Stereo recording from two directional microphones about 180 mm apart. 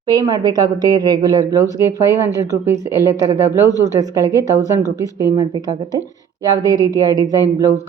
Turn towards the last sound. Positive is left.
turn(degrees=-20)  # may be behind; listen again after turning